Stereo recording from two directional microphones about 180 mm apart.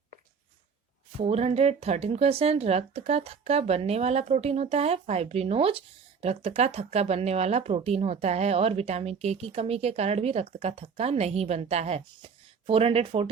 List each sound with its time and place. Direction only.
1.2 s speech: 35° right (ahead or behind)